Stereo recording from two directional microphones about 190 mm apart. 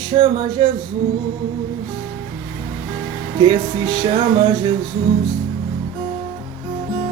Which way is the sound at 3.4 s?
25° right (ahead or behind).